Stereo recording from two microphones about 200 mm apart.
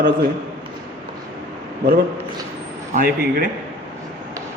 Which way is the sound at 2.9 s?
50° right (ahead or behind).